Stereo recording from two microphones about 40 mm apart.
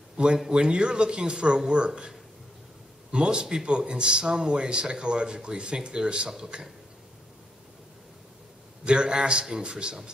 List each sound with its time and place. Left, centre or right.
0.5 s a man's voice: right
3.1 s a man's voice: right
8.8 s a man's voice: right